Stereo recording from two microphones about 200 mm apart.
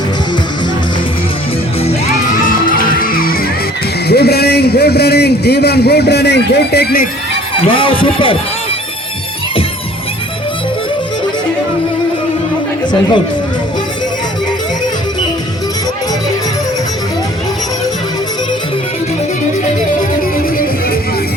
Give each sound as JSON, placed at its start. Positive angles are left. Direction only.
{"t": 2.6, "sound": "music", "side_deg": 45}
{"t": 4.1, "sound": "a man's voice", "side_deg": 50}
{"t": 7.7, "sound": "speech", "side_deg": 25}